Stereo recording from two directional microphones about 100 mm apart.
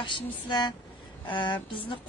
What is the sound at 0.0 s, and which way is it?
Speech, 50° left (ahead or behind).